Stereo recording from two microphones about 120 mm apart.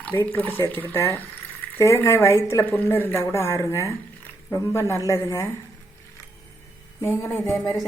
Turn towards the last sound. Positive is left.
turn(degrees=20)  # may be behind; listen again after turning